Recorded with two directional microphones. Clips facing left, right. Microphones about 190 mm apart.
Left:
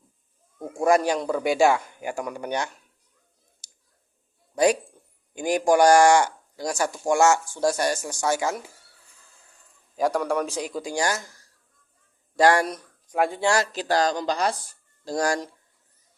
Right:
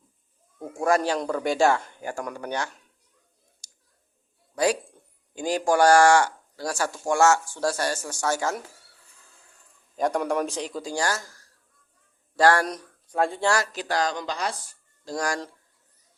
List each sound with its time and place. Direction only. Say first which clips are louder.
0.6 s speech: left 3 dB; 10° left (ahead or behind)
3.6 s a sound: left 1 dB; 30° left (ahead or behind)
4.5 s speech: left 3 dB; 20° left (ahead or behind)
10.0 s speech: left 1 dB; centre (ahead or behind); by 11.3 s 20° left (ahead or behind)
12.4 s speech: left 1 dB; 15° left (ahead or behind)
13.5 s speech: left 3 dB; 25° left (ahead or behind); by 14.5 s 40° left (ahead or behind)
15.0 s speech: left 4 dB; 30° left (ahead or behind)